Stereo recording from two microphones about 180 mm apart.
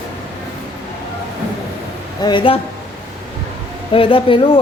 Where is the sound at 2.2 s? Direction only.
25° left (ahead or behind).